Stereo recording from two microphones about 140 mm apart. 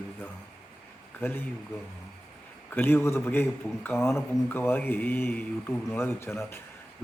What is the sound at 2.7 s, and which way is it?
A man's voice, 15° left (ahead or behind).